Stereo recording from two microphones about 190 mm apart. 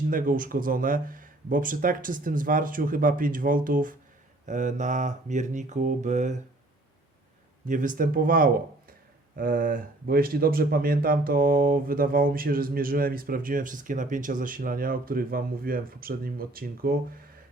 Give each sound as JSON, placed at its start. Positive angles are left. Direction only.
{"t": 0.1, "sound": "a man's voice", "side_deg": -45}
{"t": 4.4, "sound": "mantra", "side_deg": -40}
{"t": 7.7, "sound": "a man's voice", "side_deg": -45}